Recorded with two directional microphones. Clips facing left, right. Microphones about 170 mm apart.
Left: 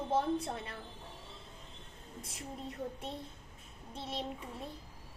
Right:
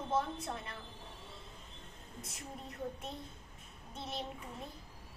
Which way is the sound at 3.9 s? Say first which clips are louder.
Left 2 dB; 30° left (ahead or behind).